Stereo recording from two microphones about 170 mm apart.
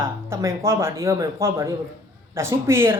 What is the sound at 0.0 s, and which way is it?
Speech, 15° right (ahead or behind).